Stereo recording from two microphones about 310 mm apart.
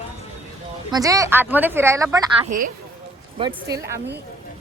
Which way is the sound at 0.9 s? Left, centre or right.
Centre.